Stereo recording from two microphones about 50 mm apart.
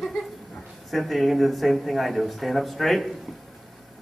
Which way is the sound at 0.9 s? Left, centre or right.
Centre.